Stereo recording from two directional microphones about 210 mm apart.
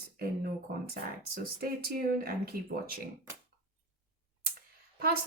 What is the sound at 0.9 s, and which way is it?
A woman's voice, 45° right (ahead or behind).